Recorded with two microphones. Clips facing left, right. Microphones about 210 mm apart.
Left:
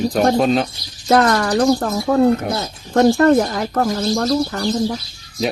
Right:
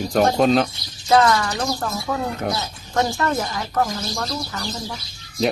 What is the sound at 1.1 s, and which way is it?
Speech, 55° left (ahead or behind).